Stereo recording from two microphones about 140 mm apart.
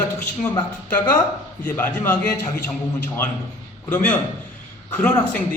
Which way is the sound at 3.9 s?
10° left (ahead or behind).